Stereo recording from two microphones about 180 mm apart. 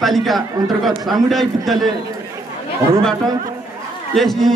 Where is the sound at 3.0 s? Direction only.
5° left (ahead or behind).